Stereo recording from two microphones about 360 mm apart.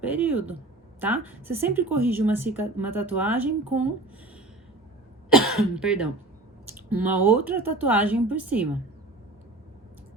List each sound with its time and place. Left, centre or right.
0.0 s a woman's voice: centre
5.3 s a woman's voice: centre